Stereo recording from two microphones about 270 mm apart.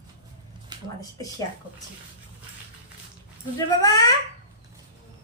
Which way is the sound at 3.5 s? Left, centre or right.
Centre.